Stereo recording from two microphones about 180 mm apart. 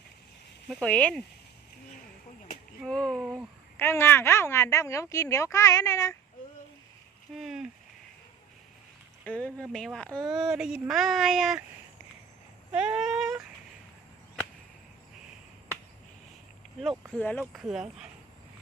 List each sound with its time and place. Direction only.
0.7 s child singing: 5° left (ahead or behind)
2.8 s child singing: 5° left (ahead or behind)
3.3 s a woman's voice: 10° left (ahead or behind)
7.3 s child singing: centre (ahead or behind)
9.2 s child singing: 5° left (ahead or behind)
12.7 s child singing: 5° right (ahead or behind)
17.1 s a woman's voice: 10° left (ahead or behind)
17.4 s child singing: centre (ahead or behind)